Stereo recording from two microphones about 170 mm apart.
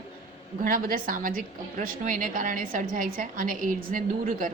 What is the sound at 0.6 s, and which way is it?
A woman's voice, 55° right (ahead or behind).